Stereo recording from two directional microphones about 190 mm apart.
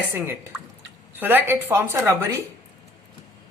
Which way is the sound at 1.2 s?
10° right (ahead or behind).